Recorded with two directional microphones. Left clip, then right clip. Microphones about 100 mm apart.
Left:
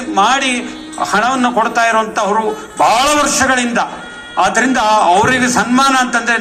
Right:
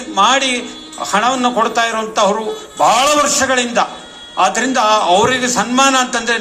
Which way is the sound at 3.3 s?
45° right (ahead or behind).